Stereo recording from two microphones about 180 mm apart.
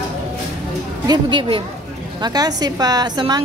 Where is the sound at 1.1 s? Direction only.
25° right (ahead or behind).